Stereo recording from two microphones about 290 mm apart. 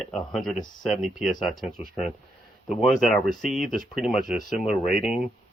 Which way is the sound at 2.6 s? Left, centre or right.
Centre.